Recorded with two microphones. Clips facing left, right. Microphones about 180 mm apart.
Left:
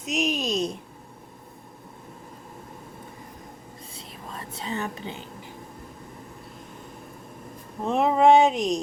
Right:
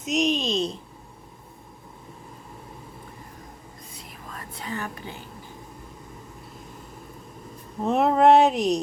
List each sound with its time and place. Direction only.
0.0 s a woman's voice: centre (ahead or behind)
3.9 s whispering: 25° left (ahead or behind)
7.9 s speech: centre (ahead or behind)